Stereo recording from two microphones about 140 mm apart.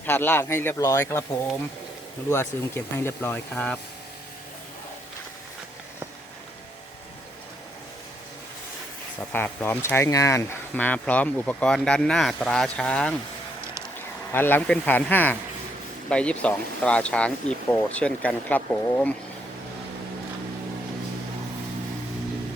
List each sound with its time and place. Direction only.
0.0 s speech: 15° left (ahead or behind)
9.3 s speech: 15° left (ahead or behind)
14.3 s speech: 15° left (ahead or behind)